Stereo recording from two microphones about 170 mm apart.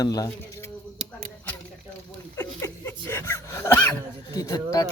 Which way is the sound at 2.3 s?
15° left (ahead or behind).